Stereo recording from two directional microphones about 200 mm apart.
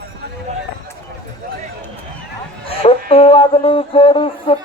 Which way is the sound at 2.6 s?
30° left (ahead or behind).